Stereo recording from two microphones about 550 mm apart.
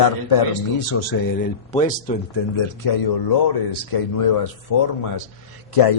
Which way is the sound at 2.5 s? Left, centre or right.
Left.